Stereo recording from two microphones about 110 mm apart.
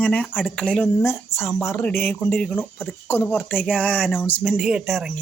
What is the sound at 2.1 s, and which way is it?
Speech, 5° left (ahead or behind).